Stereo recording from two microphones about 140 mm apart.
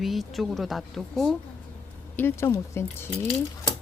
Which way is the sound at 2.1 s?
15° left (ahead or behind).